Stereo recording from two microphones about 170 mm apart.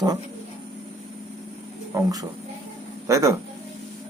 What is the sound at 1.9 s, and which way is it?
A man's voice, 20° right (ahead or behind).